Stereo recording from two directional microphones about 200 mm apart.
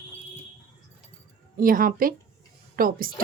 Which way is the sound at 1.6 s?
45° right (ahead or behind).